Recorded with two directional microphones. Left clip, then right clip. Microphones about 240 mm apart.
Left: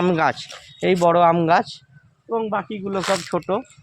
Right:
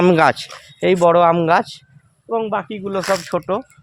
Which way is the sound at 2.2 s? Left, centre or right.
Right.